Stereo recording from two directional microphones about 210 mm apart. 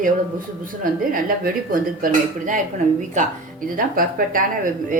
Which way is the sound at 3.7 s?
40° right (ahead or behind).